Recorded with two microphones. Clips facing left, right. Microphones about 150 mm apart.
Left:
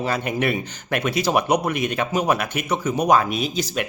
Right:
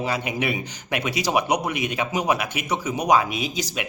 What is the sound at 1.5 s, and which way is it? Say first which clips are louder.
Speech: left 3 dB; 55° left (ahead or behind).